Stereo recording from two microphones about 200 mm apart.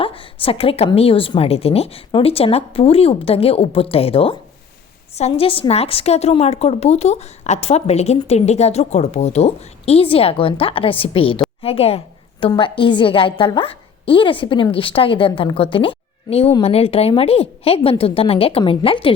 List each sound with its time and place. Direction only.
0.0 s a woman's voice: 25° left (ahead or behind)